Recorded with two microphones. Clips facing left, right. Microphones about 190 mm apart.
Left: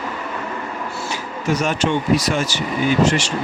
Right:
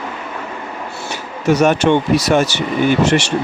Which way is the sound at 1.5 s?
70° right (ahead or behind).